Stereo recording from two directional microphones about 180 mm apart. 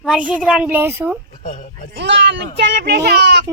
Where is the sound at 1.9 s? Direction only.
75° right (ahead or behind).